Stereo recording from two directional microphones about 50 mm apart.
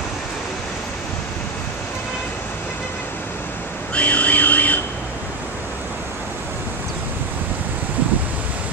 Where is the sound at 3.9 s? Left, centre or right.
Left.